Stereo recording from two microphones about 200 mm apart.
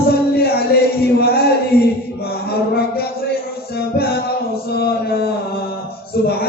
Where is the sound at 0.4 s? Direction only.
55° left (ahead or behind).